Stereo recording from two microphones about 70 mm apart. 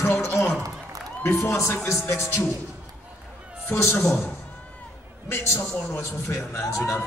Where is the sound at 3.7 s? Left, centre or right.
Left.